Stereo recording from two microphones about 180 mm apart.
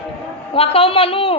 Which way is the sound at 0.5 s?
30° left (ahead or behind).